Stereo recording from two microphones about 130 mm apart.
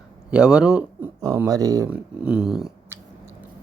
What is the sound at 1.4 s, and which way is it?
Speech, 25° right (ahead or behind).